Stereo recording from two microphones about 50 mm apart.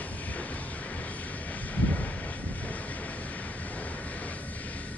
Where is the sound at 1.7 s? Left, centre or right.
Left.